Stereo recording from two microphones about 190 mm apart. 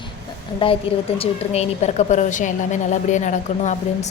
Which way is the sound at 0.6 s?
30° left (ahead or behind).